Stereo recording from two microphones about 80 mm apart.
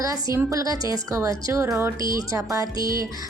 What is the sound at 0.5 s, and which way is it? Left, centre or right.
A woman's voice, right.